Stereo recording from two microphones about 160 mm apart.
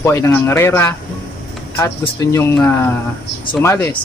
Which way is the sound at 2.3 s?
10° left (ahead or behind).